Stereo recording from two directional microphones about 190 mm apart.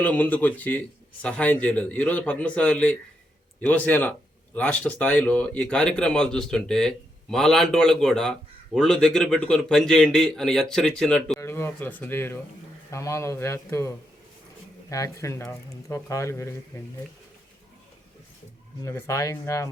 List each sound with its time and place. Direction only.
0.0 s speech: 10° left (ahead or behind)
11.3 s speech: 15° left (ahead or behind)
18.9 s speech: 15° left (ahead or behind)